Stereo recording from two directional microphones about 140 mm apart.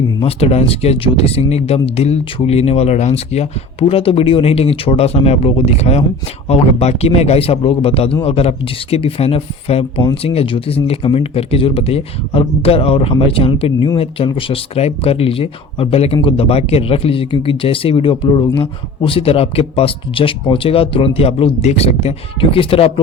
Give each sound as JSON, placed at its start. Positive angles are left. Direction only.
{"t": 0.2, "sound": "speech", "side_deg": 45}